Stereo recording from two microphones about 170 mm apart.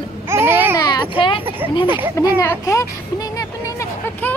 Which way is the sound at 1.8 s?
10° right (ahead or behind).